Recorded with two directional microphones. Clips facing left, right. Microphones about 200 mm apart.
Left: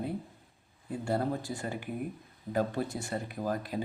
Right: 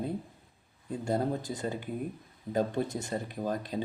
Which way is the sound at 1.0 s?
20° right (ahead or behind).